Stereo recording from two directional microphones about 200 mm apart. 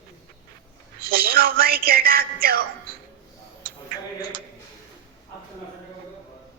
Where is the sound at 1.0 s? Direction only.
50° right (ahead or behind).